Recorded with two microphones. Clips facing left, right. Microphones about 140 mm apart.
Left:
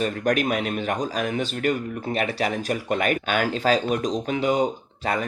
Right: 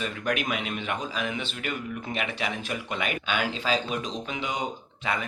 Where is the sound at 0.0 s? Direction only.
45° left (ahead or behind).